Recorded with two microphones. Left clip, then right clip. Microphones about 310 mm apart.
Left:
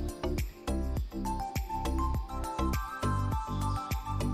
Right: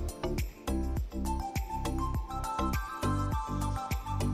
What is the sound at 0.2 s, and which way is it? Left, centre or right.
Music, centre.